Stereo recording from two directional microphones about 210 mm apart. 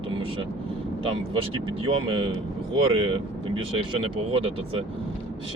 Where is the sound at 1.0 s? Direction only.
25° right (ahead or behind).